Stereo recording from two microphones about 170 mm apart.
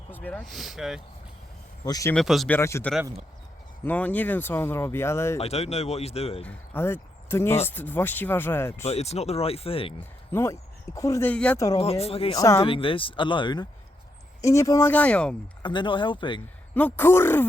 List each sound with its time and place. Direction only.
0.1 s speech: 10° left (ahead or behind)
1.8 s speech: 20° left (ahead or behind)
2.1 s speech: centre (ahead or behind)
2.5 s speech: 15° left (ahead or behind)
5.4 s speech: 35° left (ahead or behind)
6.4 s speech: 15° left (ahead or behind)
8.8 s speech: 40° left (ahead or behind)
10.0 s speech: 15° left (ahead or behind)
11.8 s speech: 35° left (ahead or behind)
12.3 s speech: 20° left (ahead or behind)
12.6 s speech: 30° left (ahead or behind); by 15.4 s 5° left (ahead or behind)
15.6 s speech: 30° left (ahead or behind)
16.7 s speech: 10° left (ahead or behind)